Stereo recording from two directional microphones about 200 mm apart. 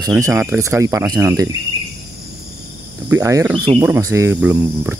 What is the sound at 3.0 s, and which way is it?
Cricket, 15° right (ahead or behind).